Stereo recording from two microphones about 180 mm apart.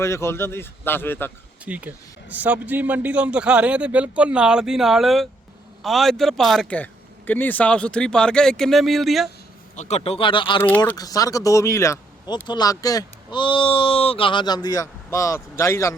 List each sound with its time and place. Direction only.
0.0 s speech: 15° left (ahead or behind)
1.6 s a man's voice: 10° right (ahead or behind)
9.7 s speech: 40° left (ahead or behind); by 16.0 s 15° left (ahead or behind)